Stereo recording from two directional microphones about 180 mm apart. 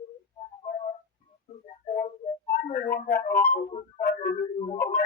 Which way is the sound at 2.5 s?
60° left (ahead or behind).